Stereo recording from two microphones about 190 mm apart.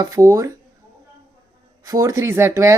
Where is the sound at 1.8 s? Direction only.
15° right (ahead or behind).